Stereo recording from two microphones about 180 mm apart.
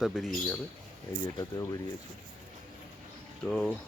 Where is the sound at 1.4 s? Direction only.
20° left (ahead or behind).